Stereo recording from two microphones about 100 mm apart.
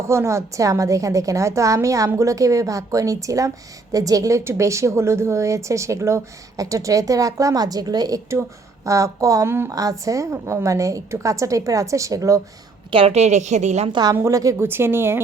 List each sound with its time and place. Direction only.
0.1 s a woman's voice: 30° right (ahead or behind)
12.9 s a woman's voice: 80° right
13.9 s a woman's voice: 45° right (ahead or behind)
14.2 s a woman's voice: 35° right (ahead or behind)